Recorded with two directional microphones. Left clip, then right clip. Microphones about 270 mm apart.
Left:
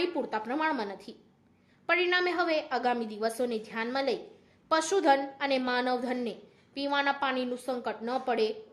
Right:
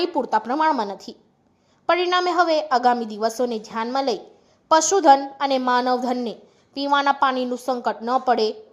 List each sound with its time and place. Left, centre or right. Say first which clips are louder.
0.0 s a woman's voice: right 10 dB; centre